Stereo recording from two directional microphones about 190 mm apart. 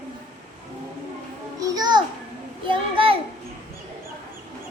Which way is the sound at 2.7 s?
30° right (ahead or behind).